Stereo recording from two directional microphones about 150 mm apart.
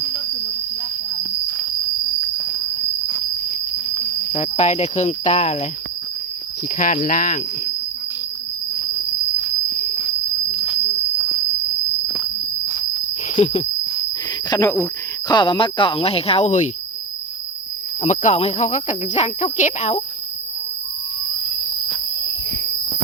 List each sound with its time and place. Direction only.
1.2 s a sound: 15° right (ahead or behind)
2.2 s cricket: 5° right (ahead or behind)
4.3 s speech: 50° left (ahead or behind)
6.7 s speech: 55° left (ahead or behind)
10.5 s cricket: centre (ahead or behind)
12.0 s walk: 5° right (ahead or behind)
13.2 s insect: 45° left (ahead or behind)
14.5 s speech: 20° left (ahead or behind)
15.3 s speech: 35° left (ahead or behind)
18.0 s speech: 50° left (ahead or behind)